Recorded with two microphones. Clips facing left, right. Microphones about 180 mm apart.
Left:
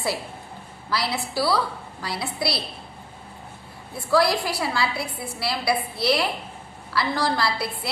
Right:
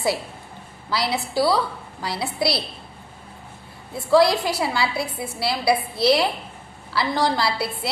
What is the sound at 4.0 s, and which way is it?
A woman's voice, 20° right (ahead or behind).